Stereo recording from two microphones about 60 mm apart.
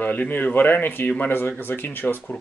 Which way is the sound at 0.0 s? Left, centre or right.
Left.